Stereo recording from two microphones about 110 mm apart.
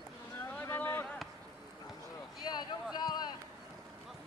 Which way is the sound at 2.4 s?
40° left (ahead or behind).